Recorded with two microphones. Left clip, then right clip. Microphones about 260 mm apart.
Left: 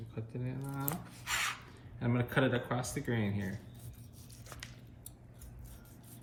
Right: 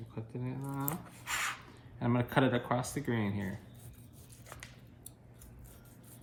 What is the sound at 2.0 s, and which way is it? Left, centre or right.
Speech, right.